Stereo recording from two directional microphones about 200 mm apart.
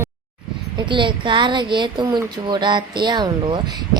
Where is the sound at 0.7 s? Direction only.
25° right (ahead or behind).